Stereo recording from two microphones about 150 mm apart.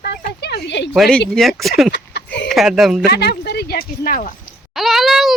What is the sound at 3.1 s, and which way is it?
Speech, 90° left.